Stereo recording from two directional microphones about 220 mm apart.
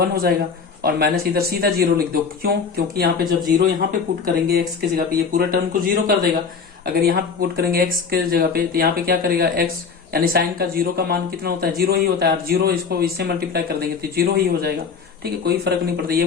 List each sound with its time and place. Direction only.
0.0 s speech: 45° right (ahead or behind)